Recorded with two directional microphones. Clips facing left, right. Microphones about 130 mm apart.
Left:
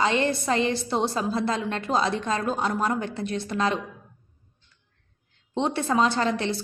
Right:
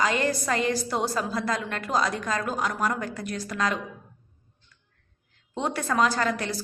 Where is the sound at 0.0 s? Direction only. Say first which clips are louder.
Left 2 dB; 25° left (ahead or behind).